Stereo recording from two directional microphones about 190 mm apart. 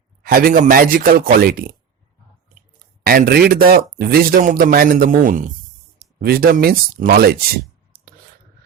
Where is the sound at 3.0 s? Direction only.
50° right (ahead or behind).